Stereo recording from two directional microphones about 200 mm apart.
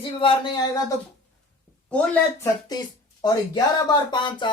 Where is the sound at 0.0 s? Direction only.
25° left (ahead or behind).